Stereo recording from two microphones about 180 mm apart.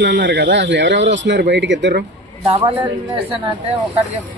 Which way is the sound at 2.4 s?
35° right (ahead or behind).